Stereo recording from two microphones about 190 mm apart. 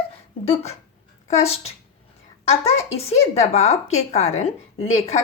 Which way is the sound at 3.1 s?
35° left (ahead or behind).